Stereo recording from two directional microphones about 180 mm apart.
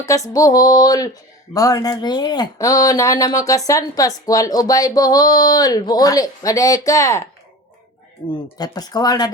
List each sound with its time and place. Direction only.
0.1 s speech: 20° left (ahead or behind)
8.5 s speech: 20° left (ahead or behind)